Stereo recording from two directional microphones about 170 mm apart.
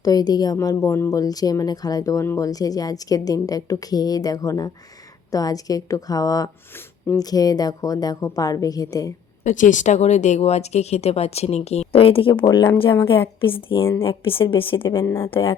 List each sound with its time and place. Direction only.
0.0 s a woman's voice: 20° left (ahead or behind)
9.4 s speech: 45° left (ahead or behind); by 15.5 s 30° left (ahead or behind)